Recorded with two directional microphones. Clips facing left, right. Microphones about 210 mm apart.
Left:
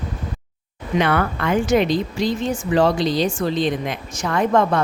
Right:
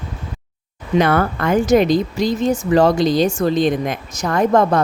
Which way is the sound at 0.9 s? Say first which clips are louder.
Right 4 dB; 40° right (ahead or behind).